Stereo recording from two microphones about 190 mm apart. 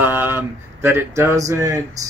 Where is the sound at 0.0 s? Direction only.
10° right (ahead or behind).